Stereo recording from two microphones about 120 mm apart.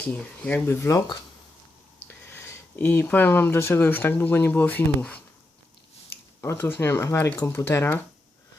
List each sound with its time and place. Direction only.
0.0 s speech: 10° left (ahead or behind)
0.9 s speech: 30° left (ahead or behind)
2.0 s speech: 20° left (ahead or behind)
6.4 s speech: 20° left (ahead or behind)